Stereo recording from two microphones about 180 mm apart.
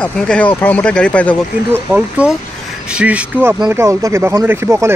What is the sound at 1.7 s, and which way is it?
Speech, 10° right (ahead or behind).